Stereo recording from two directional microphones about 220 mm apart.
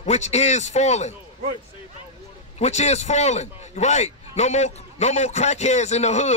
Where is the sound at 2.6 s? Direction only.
30° left (ahead or behind).